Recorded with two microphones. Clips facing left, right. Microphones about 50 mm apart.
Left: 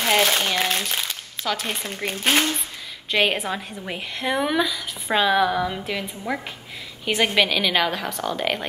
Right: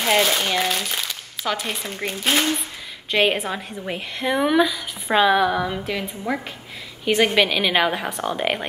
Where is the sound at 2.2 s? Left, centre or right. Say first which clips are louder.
Left 1 dB; left.